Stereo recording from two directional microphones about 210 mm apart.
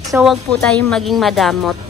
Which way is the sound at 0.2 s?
Centre (ahead or behind).